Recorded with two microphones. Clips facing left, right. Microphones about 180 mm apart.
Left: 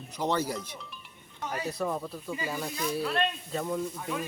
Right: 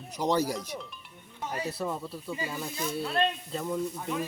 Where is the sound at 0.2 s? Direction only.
10° right (ahead or behind).